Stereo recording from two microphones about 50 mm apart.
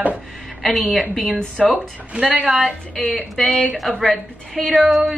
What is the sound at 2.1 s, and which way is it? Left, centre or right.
Speech, right.